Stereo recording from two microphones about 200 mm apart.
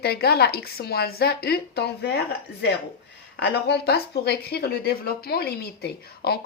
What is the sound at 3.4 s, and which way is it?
Speech, 55° left (ahead or behind).